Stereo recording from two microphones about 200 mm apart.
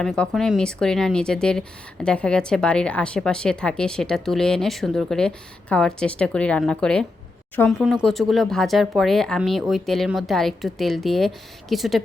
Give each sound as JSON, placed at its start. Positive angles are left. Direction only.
{"t": 0.0, "sound": "speech", "side_deg": 0}